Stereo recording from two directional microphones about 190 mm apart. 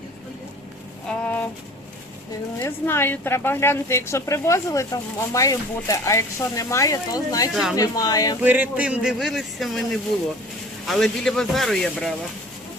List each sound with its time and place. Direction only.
1.0 s a sound: 5° left (ahead or behind)
2.6 s a woman's voice: 15° left (ahead or behind)
7.5 s speech: centre (ahead or behind)
7.8 s speech: 20° left (ahead or behind)
8.4 s speech: 10° right (ahead or behind)